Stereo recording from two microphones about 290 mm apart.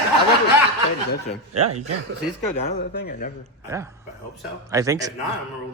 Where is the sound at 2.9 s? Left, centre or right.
Left.